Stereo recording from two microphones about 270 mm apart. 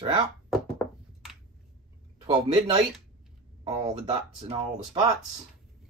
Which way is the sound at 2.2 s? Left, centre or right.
Right.